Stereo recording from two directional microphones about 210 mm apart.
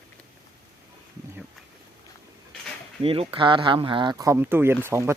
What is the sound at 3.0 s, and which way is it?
Speech, 25° right (ahead or behind).